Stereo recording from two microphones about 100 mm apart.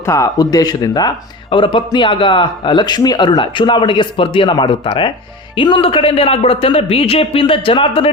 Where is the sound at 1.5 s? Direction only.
55° left (ahead or behind).